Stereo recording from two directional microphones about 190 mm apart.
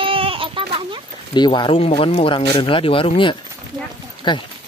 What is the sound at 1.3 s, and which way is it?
Speech, 25° left (ahead or behind).